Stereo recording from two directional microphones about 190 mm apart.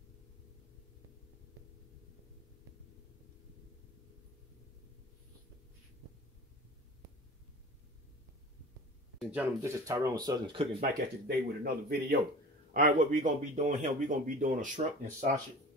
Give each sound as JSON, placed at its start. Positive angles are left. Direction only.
{"t": 9.2, "sound": "speech", "side_deg": -10}
{"t": 10.8, "sound": "speech", "side_deg": -55}
{"t": 12.7, "sound": "speech", "side_deg": -45}